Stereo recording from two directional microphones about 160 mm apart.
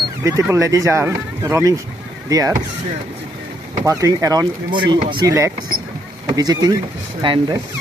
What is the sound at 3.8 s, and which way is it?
Speech, 20° right (ahead or behind).